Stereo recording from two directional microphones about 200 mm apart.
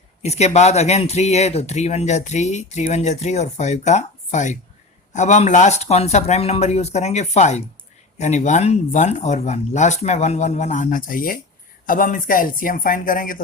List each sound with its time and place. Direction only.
0.2 s speech: 35° left (ahead or behind)